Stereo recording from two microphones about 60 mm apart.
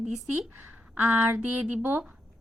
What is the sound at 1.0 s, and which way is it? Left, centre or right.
A woman's voice, right.